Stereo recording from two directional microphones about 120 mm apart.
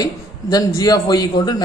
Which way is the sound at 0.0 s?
30° left (ahead or behind).